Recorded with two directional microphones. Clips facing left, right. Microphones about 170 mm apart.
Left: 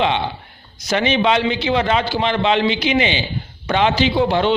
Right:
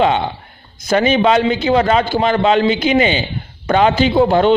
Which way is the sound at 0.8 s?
50° right (ahead or behind).